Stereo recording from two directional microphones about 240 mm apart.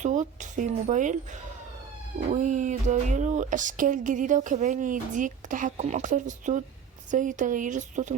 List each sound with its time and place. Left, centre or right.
0.0 s speech: right